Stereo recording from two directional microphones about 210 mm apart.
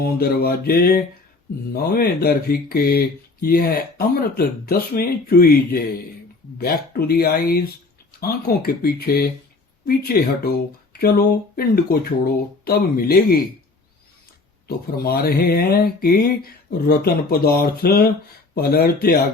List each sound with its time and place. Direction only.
0.0 s speech: 45° left (ahead or behind)
14.9 s speech: 45° left (ahead or behind)